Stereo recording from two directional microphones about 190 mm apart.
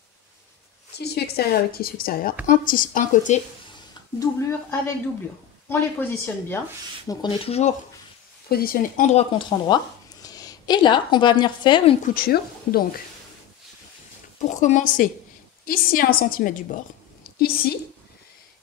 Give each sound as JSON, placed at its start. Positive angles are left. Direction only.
{"t": 0.9, "sound": "a woman's voice", "side_deg": 60}
{"t": 4.2, "sound": "speech", "side_deg": 15}
{"t": 7.1, "sound": "speech", "side_deg": 25}
{"t": 8.5, "sound": "a woman's voice", "side_deg": 50}
{"t": 9.7, "sound": "a woman's voice", "side_deg": 20}
{"t": 12.1, "sound": "a woman's voice", "side_deg": 50}
{"t": 14.4, "sound": "a woman's voice", "side_deg": 40}